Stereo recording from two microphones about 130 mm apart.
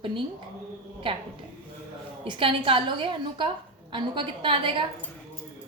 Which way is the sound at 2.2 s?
40° right (ahead or behind).